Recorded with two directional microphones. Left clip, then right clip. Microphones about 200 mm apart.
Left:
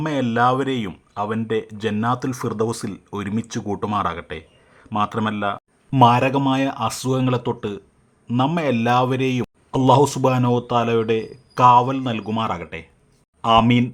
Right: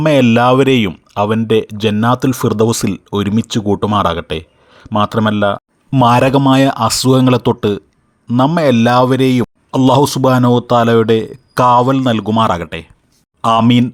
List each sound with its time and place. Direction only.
0.0 s a man's voice: 35° right (ahead or behind)